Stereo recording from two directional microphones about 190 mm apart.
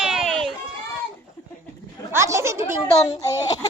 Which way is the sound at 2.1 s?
15° right (ahead or behind).